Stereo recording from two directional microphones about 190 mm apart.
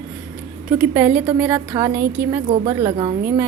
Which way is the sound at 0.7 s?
10° right (ahead or behind).